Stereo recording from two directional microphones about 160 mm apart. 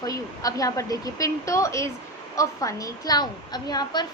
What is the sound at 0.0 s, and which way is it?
A woman's voice, 20° left (ahead or behind).